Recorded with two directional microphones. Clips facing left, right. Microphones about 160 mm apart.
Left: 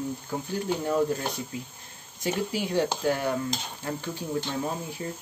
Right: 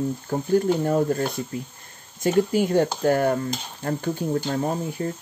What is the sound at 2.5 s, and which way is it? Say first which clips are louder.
Speech: right 6 dB; 50° right (ahead or behind).